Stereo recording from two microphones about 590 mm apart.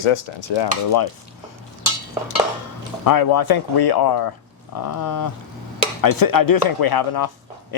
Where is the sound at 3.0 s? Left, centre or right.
Left.